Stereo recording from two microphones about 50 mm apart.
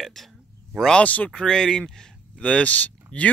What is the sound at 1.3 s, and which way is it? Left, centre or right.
A man's voice, centre.